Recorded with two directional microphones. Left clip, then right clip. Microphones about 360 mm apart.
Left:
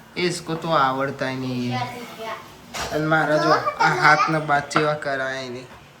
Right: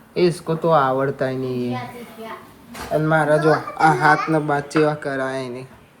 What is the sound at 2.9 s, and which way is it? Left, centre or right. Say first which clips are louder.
Speech: right 3 dB; centre.